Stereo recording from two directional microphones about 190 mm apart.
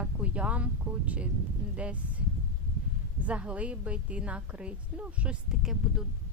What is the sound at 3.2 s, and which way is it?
A woman's voice, 5° right (ahead or behind).